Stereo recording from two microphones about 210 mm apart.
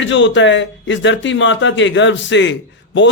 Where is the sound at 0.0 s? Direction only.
60° left (ahead or behind).